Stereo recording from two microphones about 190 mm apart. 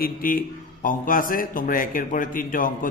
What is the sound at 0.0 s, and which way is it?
A man's voice, 50° left (ahead or behind).